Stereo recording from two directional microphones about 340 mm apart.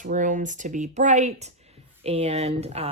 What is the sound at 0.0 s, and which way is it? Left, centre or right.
Speech, right.